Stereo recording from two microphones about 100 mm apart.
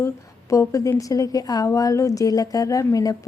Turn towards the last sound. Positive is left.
turn(degrees=35)  # may be behind; listen again after turning